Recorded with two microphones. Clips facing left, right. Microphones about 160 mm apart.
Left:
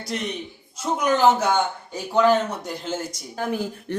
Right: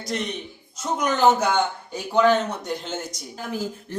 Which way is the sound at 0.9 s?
5° left (ahead or behind).